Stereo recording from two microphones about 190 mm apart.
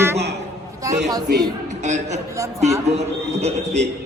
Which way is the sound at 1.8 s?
35° right (ahead or behind).